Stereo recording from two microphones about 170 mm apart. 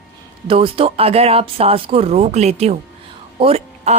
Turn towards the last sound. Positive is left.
turn(degrees=-35)  # may be behind; listen again after turning